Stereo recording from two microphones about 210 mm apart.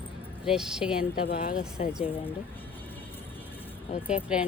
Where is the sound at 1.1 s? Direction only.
45° left (ahead or behind).